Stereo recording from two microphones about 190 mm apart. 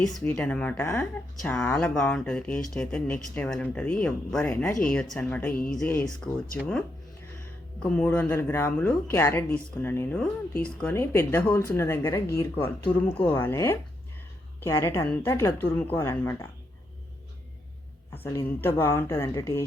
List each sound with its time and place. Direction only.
0.3 s speech: 5° left (ahead or behind)
14.8 s speech: 15° left (ahead or behind)
18.1 s speech: 10° left (ahead or behind)